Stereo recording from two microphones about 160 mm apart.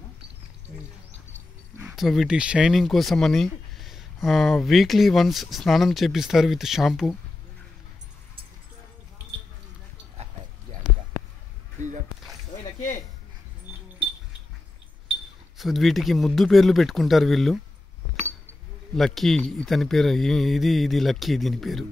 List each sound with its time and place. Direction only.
2.0 s speech: centre (ahead or behind)
11.8 s a sound: 50° right (ahead or behind)
15.5 s speech: centre (ahead or behind)
18.9 s speech: centre (ahead or behind)